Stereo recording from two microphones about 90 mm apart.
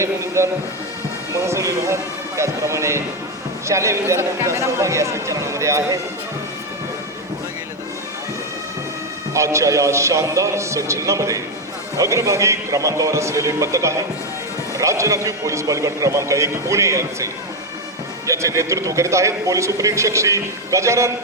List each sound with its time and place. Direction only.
0.0 s a man's voice: 30° right (ahead or behind)
9.3 s a man's voice: 35° right (ahead or behind)
18.3 s a man's voice: 35° right (ahead or behind)